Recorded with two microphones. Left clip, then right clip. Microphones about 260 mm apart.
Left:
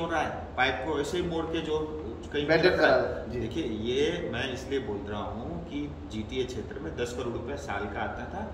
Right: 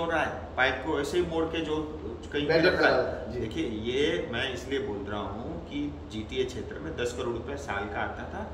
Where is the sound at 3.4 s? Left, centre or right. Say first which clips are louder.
Even; centre.